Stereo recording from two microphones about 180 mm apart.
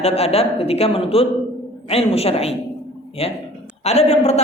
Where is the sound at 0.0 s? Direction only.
35° left (ahead or behind).